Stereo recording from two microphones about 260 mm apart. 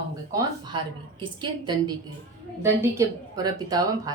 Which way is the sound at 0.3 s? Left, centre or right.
Centre.